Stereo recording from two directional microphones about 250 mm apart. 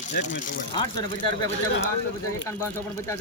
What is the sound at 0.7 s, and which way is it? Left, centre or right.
Speech, centre.